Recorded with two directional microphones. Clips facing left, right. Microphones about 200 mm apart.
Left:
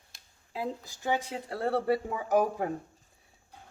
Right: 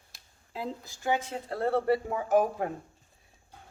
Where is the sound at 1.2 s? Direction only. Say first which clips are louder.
Right 2 dB; 15° left (ahead or behind).